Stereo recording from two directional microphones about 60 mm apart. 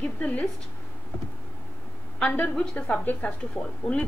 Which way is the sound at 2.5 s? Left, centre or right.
Centre.